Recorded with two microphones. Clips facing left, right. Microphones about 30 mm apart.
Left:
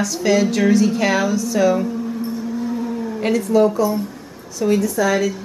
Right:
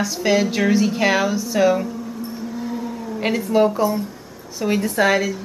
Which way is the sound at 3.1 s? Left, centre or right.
Centre.